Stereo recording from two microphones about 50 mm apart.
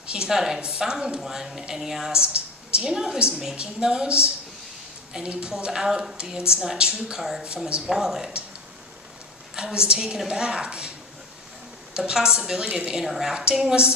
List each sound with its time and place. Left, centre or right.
0.1 s a woman's voice: centre
2.2 s a sound: right
2.8 s a woman's voice: centre
9.6 s a woman's voice: centre
11.9 s a woman's voice: centre
13.3 s a woman's voice: centre